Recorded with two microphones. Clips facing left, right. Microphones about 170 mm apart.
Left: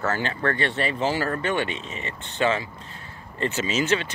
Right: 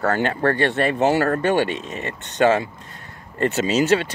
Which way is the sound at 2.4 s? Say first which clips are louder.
Right 6 dB; 45° right (ahead or behind).